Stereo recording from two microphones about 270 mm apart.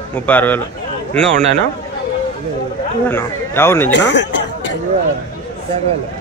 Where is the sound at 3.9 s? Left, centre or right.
Left.